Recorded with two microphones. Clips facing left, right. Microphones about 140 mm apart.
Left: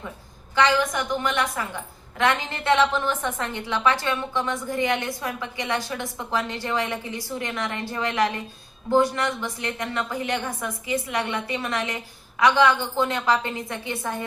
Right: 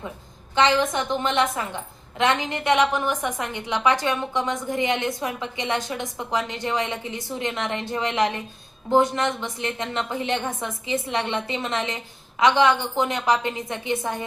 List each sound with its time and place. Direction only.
0.5 s a woman's voice: 25° right (ahead or behind)